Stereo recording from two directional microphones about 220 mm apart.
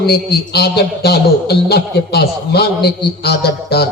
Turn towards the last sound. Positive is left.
turn(degrees=45)  # may be behind; listen again after turning